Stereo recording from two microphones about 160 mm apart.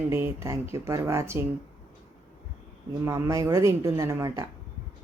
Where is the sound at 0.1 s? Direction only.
15° right (ahead or behind).